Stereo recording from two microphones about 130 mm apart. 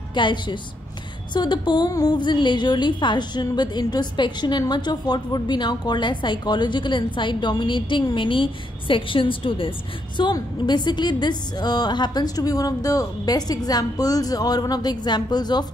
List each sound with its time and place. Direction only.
0.1 s a woman's voice: 35° left (ahead or behind)